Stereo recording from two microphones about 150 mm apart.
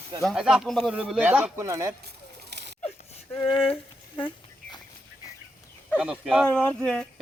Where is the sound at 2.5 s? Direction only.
90° right.